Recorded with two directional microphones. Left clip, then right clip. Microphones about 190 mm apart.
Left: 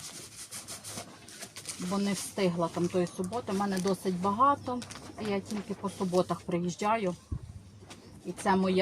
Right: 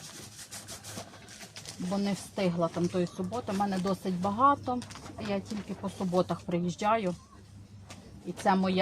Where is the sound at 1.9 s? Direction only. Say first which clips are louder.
Even; 30° right (ahead or behind).